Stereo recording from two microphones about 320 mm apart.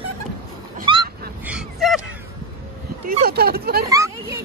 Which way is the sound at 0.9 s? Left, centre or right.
Centre.